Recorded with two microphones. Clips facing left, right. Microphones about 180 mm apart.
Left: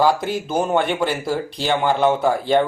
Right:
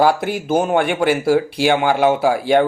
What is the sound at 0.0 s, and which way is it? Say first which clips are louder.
Speech: right 2 dB; 60° right (ahead or behind).